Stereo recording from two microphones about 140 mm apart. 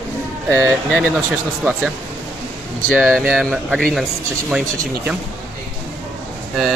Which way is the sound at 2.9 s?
5° left (ahead or behind).